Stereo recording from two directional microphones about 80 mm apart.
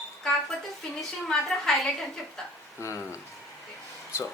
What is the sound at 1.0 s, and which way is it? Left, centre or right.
Speech, centre.